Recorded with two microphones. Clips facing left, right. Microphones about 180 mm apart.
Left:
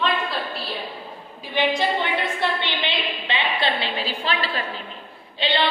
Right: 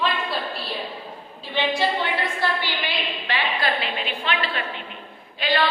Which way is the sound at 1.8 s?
20° left (ahead or behind).